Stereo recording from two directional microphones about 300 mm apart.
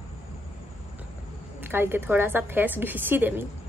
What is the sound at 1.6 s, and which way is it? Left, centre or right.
A woman's voice, centre.